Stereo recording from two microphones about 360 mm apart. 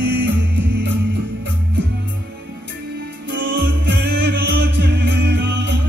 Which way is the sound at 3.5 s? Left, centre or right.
Right.